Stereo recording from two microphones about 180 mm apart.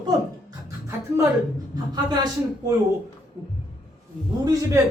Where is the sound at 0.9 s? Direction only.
15° right (ahead or behind).